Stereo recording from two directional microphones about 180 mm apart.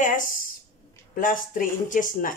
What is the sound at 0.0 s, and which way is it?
A woman's voice, 45° left (ahead or behind).